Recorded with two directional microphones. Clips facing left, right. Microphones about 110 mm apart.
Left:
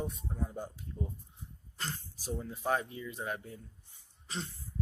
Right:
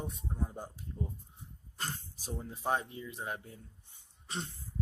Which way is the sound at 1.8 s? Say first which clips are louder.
Left 1 dB; 25° right (ahead or behind).